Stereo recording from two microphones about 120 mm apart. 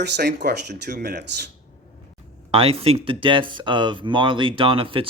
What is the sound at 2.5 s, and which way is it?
Speech, 55° right (ahead or behind).